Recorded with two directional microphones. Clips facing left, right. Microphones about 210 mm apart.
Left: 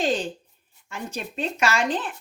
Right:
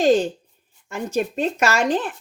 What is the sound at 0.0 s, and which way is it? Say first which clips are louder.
Speech: right 8 dB; 45° right (ahead or behind).